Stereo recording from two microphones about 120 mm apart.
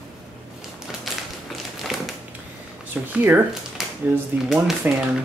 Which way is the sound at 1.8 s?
Centre (ahead or behind).